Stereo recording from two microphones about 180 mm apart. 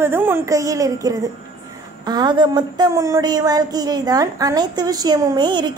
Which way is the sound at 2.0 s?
25° right (ahead or behind).